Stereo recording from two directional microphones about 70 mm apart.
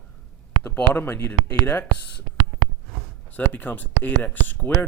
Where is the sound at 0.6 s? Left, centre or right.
Left.